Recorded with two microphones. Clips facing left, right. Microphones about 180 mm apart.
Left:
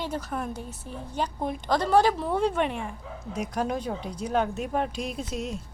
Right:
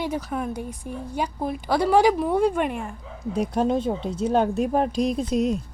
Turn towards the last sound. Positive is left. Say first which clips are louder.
# right 10 dB
turn(degrees=-40)  # may be behind; listen again after turning